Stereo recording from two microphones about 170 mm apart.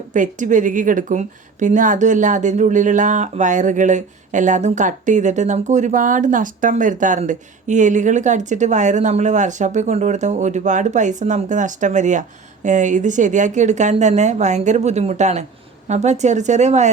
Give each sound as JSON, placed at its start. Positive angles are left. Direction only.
{"t": 0.1, "sound": "a woman's voice", "side_deg": -50}